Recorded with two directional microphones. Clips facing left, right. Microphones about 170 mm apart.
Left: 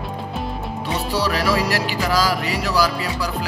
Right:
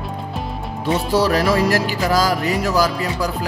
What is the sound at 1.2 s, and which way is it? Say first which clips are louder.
Music: right 4 dB; 50° right (ahead or behind).